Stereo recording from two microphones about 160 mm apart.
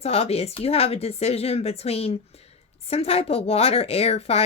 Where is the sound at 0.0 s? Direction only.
40° left (ahead or behind).